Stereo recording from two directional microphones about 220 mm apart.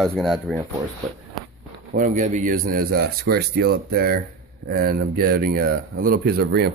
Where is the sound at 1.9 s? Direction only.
35° right (ahead or behind).